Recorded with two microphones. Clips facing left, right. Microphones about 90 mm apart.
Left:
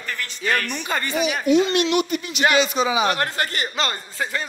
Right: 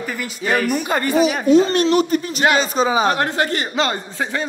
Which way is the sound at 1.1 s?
35° right (ahead or behind).